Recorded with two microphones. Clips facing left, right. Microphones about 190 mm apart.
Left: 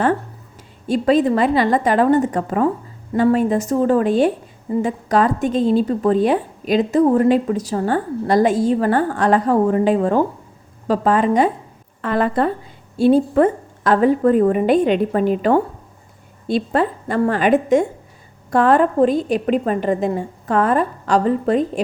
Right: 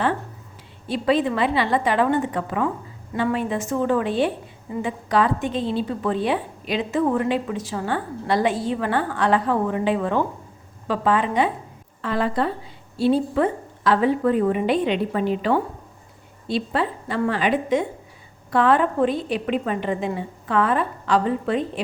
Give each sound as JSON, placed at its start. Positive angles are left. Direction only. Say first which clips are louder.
{"t": 0.9, "sound": "a woman's voice", "louder": "left 5 dB", "side_deg": 45}
{"t": 12.0, "sound": "a woman's voice", "louder": "left 5 dB", "side_deg": 55}